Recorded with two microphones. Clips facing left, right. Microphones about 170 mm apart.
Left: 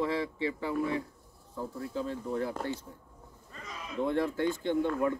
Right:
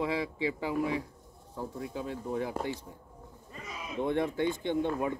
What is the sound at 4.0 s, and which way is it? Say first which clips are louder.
Speech: even; 20° right (ahead or behind).